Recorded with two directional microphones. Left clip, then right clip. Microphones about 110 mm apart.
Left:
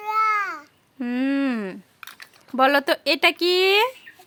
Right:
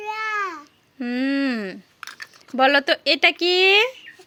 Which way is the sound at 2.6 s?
35° left (ahead or behind).